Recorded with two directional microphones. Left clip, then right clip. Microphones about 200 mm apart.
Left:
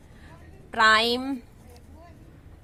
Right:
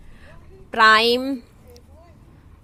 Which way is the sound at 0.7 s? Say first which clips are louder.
Right 5 dB; 25° right (ahead or behind).